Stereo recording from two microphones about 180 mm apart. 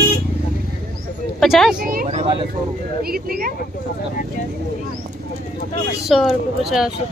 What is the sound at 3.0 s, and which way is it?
Speech, 55° right (ahead or behind).